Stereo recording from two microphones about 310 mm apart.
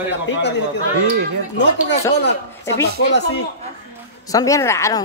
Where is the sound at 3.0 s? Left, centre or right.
Left.